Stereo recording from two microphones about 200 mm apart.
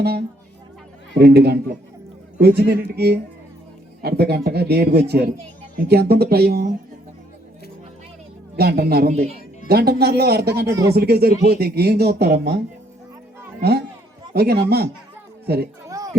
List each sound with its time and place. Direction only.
1.2 s speech: 55° right (ahead or behind)
8.5 s speech: 50° right (ahead or behind)
9.0 s a man's voice: 30° right (ahead or behind)
9.6 s speech: 50° right (ahead or behind)
10.7 s speech: 15° right (ahead or behind)
10.9 s speech: 50° right (ahead or behind)
13.6 s speech: 50° right (ahead or behind)
15.9 s a sound: 15° right (ahead or behind)